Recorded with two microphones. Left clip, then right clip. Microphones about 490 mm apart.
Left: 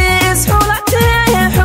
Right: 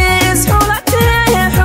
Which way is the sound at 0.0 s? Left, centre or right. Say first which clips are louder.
Even; left.